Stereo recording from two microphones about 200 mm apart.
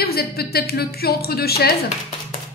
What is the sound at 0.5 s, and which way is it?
A woman's voice, 50° left (ahead or behind).